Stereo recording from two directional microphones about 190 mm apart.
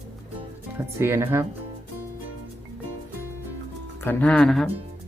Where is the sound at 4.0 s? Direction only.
10° left (ahead or behind).